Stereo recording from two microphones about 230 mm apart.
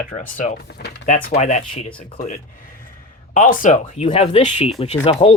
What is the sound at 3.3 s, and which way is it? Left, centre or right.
Speech, left.